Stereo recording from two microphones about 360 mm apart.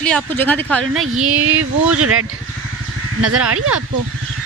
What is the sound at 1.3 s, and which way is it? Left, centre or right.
Speech, right.